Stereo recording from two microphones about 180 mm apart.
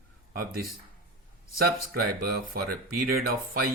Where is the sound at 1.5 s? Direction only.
55° right (ahead or behind).